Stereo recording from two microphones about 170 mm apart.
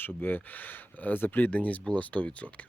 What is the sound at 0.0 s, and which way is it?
Speech, 10° left (ahead or behind).